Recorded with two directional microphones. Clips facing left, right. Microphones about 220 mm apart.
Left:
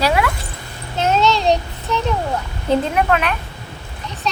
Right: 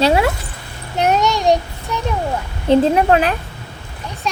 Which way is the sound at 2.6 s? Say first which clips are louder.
Right 5 dB; 30° right (ahead or behind).